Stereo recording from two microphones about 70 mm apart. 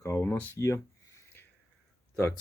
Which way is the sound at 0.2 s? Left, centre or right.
Left.